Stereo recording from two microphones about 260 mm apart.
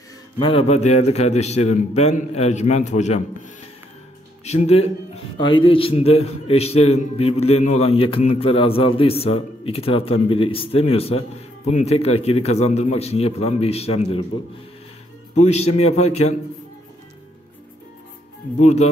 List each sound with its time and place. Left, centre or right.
0.4 s a man's voice: left
4.5 s a man's voice: left
15.4 s a man's voice: left
18.6 s a man's voice: left